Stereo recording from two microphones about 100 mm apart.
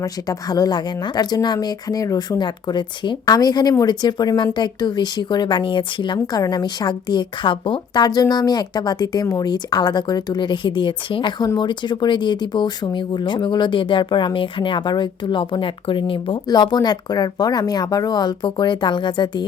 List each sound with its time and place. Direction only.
0.0 s speech: 40° left (ahead or behind); by 16.4 s 60° left (ahead or behind)
16.5 s speech: 45° left (ahead or behind)